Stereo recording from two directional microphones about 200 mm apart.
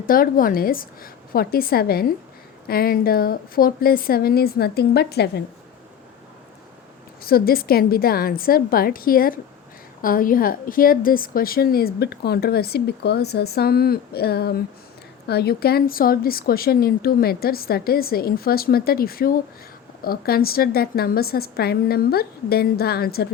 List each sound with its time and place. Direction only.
0.0 s a woman's voice: 45° left (ahead or behind)
7.2 s a woman's voice: 50° left (ahead or behind)